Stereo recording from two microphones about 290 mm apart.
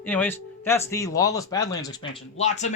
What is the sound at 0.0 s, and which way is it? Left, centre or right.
Speech, centre.